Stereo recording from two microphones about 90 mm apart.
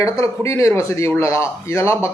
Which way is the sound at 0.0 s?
35° left (ahead or behind).